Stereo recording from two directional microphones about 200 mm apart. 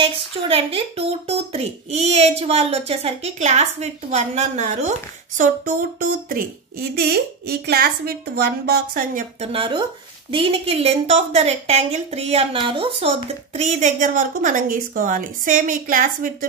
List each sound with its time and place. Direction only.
0.0 s speech: 30° right (ahead or behind); by 9.2 s 50° right (ahead or behind)
9.4 s speech: 25° right (ahead or behind); by 16.4 s 45° right (ahead or behind)